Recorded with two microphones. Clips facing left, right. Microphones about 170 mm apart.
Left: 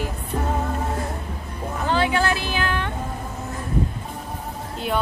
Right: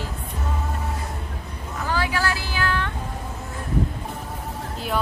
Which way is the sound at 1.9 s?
25° left (ahead or behind).